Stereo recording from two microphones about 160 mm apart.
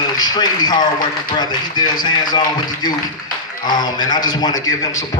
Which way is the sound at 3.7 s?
25° left (ahead or behind).